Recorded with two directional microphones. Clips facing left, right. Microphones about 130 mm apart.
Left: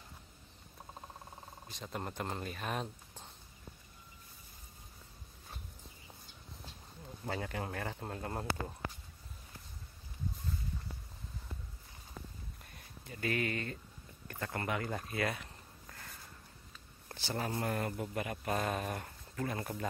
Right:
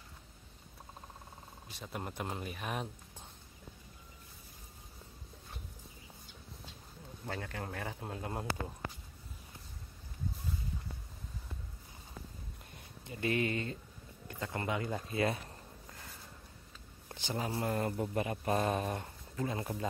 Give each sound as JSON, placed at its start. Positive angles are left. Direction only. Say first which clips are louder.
{"t": 1.7, "sound": "speech", "louder": "even", "side_deg": -5}
{"t": 7.2, "sound": "a man's voice", "louder": "left 2 dB", "side_deg": 5}
{"t": 12.7, "sound": "a sound", "louder": "right 4 dB", "side_deg": -25}
{"t": 14.2, "sound": "speech", "louder": "right 1 dB", "side_deg": -20}
{"t": 17.1, "sound": "speech", "louder": "even", "side_deg": -15}
{"t": 17.7, "sound": "speech", "louder": "right 3 dB", "side_deg": -25}